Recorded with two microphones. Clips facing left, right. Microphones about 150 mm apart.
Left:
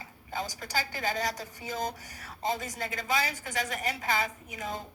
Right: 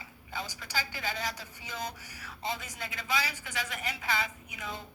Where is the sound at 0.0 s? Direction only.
45° left (ahead or behind).